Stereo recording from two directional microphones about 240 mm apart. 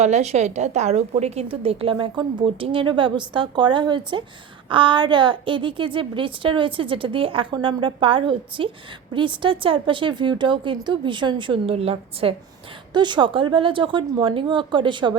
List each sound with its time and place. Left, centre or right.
0.0 s a woman's voice: right